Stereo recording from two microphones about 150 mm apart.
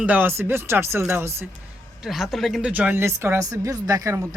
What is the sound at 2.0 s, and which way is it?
Speech, centre (ahead or behind).